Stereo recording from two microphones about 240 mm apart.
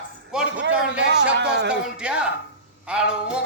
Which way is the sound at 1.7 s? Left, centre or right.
Centre.